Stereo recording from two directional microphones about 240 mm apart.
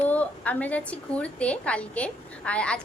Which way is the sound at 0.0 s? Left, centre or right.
Centre.